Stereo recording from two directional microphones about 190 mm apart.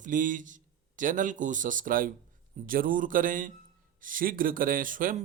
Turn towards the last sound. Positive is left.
turn(degrees=-45)  # may be behind; listen again after turning